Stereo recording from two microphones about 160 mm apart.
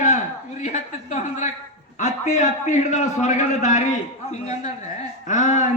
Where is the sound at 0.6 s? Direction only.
50° left (ahead or behind).